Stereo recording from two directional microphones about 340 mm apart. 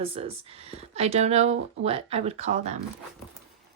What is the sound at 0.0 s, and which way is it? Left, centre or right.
Speech, centre.